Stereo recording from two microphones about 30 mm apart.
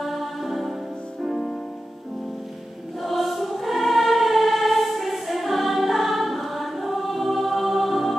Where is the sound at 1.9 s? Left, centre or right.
Centre.